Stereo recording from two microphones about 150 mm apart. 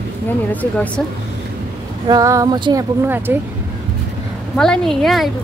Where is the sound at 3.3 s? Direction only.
15° right (ahead or behind).